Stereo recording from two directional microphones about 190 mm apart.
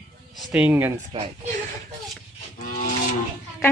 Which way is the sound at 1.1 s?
35° right (ahead or behind).